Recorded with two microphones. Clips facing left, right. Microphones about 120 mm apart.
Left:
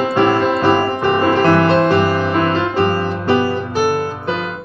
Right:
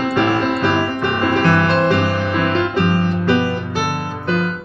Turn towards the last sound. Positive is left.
turn(degrees=35)  # may be behind; listen again after turning